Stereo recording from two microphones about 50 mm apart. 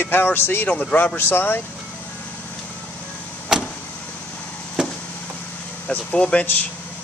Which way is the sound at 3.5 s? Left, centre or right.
Centre.